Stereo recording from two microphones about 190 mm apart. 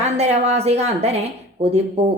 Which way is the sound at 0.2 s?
35° right (ahead or behind).